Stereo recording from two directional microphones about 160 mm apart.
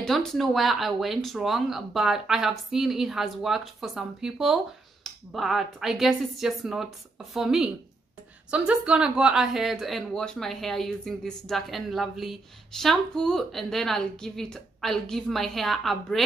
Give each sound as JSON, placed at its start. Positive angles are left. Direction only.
{"t": 0.0, "sound": "speech", "side_deg": 5}